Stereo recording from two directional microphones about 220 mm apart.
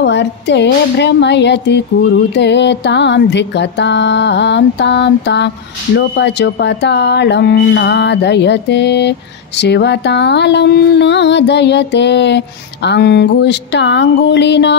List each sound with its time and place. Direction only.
0.0 s speech: 55° left (ahead or behind)